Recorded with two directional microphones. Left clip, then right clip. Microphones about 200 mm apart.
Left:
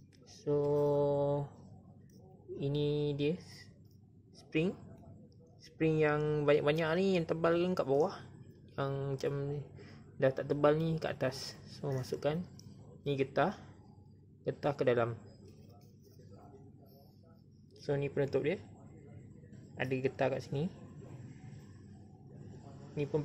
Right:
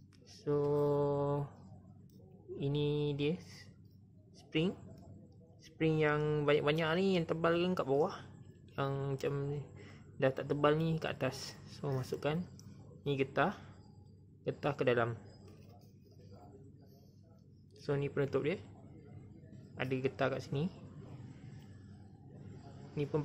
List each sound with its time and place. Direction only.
0.3 s mantra: 5° right (ahead or behind)
2.6 s speech: centre (ahead or behind)
5.8 s speech: centre (ahead or behind)
17.7 s speech: 5° right (ahead or behind)
19.8 s speech: centre (ahead or behind)